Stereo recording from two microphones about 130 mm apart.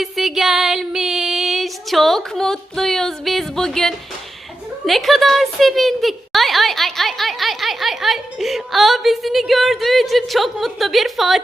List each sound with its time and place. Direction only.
0.0 s female singing: centre (ahead or behind)
4.9 s a woman's voice: centre (ahead or behind)